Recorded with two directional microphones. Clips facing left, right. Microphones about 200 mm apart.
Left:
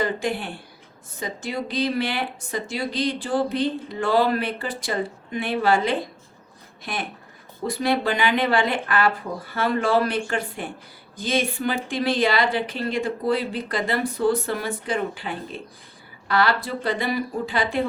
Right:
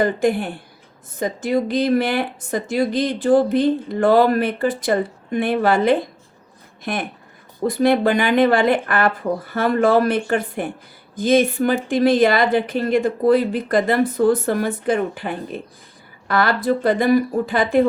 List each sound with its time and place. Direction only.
0.0 s a woman's voice: 50° right (ahead or behind)